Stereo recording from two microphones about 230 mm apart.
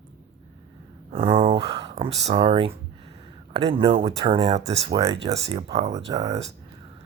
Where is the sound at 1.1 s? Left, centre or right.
Right.